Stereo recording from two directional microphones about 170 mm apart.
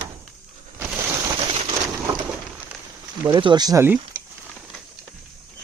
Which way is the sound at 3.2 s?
25° right (ahead or behind).